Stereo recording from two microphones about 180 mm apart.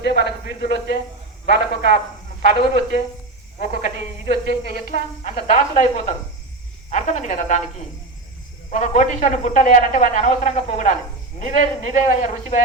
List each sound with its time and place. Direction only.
0.0 s speech: 70° left (ahead or behind)
2.4 s a man's voice: 40° left (ahead or behind)
8.7 s a man's voice: 40° left (ahead or behind)